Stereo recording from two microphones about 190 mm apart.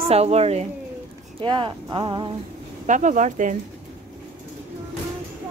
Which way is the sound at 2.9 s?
40° right (ahead or behind).